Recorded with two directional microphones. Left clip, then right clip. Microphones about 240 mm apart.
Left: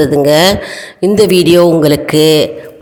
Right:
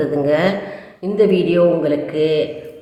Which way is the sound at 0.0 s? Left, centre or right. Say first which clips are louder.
Left 8 dB; left.